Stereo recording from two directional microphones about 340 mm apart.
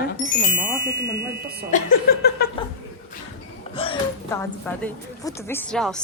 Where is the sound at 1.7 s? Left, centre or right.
Left.